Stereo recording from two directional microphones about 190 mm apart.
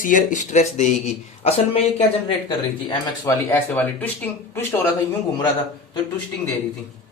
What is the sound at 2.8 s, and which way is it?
Speech, 20° left (ahead or behind).